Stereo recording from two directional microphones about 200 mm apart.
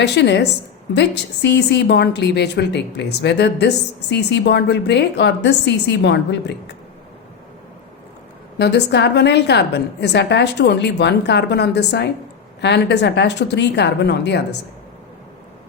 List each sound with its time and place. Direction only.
0.0 s a woman's voice: 55° left (ahead or behind)
8.5 s a woman's voice: 55° left (ahead or behind)